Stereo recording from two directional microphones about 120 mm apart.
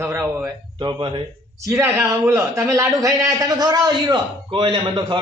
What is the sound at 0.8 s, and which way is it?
Speech, 40° right (ahead or behind).